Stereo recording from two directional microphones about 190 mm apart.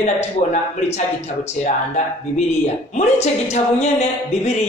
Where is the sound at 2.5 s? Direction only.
35° left (ahead or behind).